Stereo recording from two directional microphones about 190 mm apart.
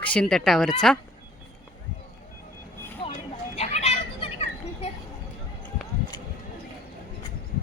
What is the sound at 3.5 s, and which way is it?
Children playing, 35° left (ahead or behind).